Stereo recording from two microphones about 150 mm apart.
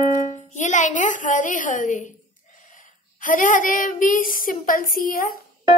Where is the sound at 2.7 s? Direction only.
60° left (ahead or behind).